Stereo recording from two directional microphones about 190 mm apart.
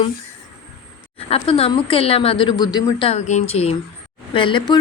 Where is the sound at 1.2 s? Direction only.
30° left (ahead or behind).